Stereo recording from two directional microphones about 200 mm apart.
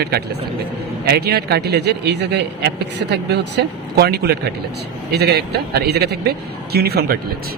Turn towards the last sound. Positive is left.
turn(degrees=-50)  # may be behind; listen again after turning